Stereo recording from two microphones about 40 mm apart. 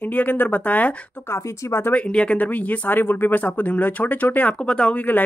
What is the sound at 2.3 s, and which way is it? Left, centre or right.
Speech, left.